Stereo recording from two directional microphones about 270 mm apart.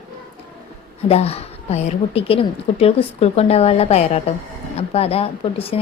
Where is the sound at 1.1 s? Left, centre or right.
Left.